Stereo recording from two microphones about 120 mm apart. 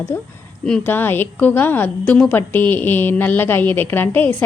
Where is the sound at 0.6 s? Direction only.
10° left (ahead or behind).